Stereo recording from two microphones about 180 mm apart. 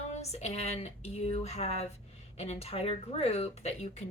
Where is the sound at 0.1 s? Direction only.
35° left (ahead or behind).